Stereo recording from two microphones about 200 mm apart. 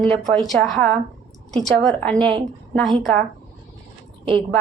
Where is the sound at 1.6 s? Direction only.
Centre (ahead or behind).